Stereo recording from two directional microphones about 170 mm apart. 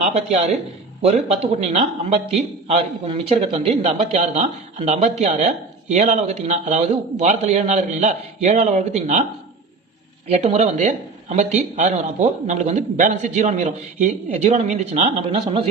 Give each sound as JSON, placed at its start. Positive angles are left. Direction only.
{"t": 0.0, "sound": "a man's voice", "side_deg": -40}
{"t": 10.2, "sound": "speech", "side_deg": -40}